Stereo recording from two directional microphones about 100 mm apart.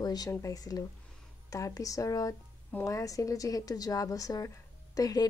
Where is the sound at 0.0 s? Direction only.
40° left (ahead or behind).